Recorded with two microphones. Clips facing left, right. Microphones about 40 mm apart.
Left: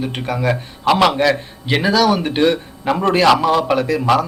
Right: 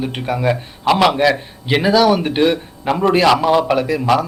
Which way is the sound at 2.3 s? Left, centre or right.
Centre.